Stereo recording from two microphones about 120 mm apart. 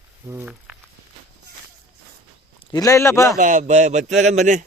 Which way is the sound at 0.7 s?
10° right (ahead or behind).